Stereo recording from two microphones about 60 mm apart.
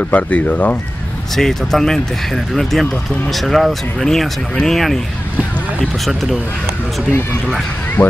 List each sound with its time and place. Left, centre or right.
0.1 s speech: left
1.3 s speech: centre
8.0 s speech: left